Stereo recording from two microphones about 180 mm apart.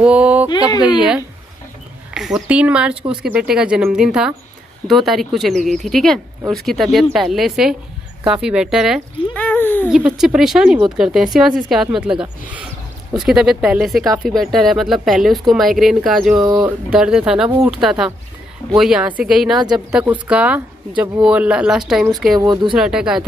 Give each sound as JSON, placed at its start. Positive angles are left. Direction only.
{"t": 0.0, "sound": "speech", "side_deg": -5}
{"t": 0.5, "sound": "speech", "side_deg": 20}
{"t": 0.8, "sound": "speech", "side_deg": -5}
{"t": 9.8, "sound": "speech", "side_deg": -5}
{"t": 22.4, "sound": "speech", "side_deg": -25}
{"t": 22.8, "sound": "speech", "side_deg": -5}